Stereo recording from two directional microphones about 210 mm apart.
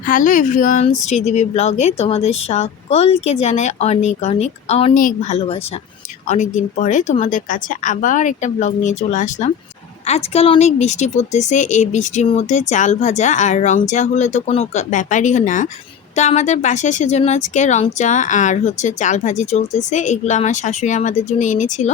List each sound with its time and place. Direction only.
0.0 s speech: 40° left (ahead or behind)
4.9 s speech: 40° left (ahead or behind)